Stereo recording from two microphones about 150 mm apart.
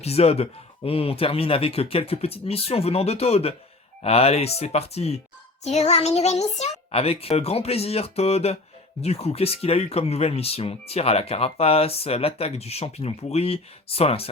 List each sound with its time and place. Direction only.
0.0 s a child's voice: 45° left (ahead or behind)